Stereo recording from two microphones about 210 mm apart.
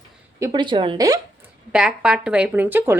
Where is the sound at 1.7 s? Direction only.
5° right (ahead or behind).